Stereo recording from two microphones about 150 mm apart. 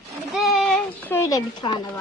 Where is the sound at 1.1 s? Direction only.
20° left (ahead or behind).